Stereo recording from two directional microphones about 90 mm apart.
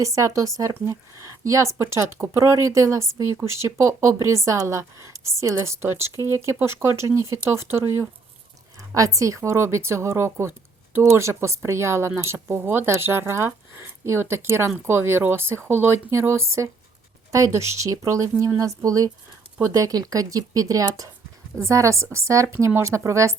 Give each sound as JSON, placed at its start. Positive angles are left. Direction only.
{"t": 0.0, "sound": "speech", "side_deg": -35}